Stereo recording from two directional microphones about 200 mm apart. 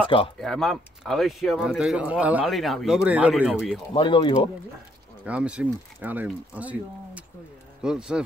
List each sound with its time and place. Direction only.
0.4 s speech: centre (ahead or behind)
3.9 s speech: 25° left (ahead or behind)
5.2 s speech: 5° right (ahead or behind)